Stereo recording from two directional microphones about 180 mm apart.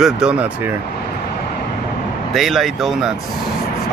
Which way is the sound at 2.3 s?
Centre (ahead or behind).